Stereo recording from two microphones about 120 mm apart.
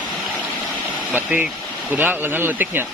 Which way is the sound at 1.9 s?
15° right (ahead or behind).